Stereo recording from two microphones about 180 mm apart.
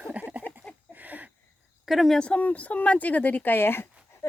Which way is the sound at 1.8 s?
Centre (ahead or behind).